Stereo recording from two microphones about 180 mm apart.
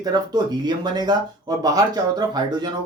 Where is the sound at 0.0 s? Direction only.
20° right (ahead or behind).